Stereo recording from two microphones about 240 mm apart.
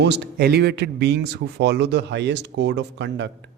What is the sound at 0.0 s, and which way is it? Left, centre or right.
Speech, right.